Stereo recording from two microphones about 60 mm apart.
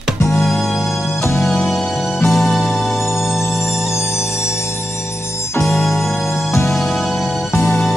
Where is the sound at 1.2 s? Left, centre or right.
Left.